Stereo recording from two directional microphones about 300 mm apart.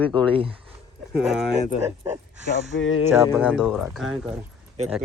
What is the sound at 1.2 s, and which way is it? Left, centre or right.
Speech, centre.